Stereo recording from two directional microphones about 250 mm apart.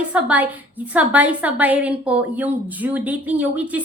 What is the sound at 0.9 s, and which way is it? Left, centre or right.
A woman's voice, centre.